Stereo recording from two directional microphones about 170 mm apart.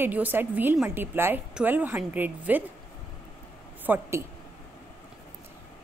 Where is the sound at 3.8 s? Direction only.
10° right (ahead or behind).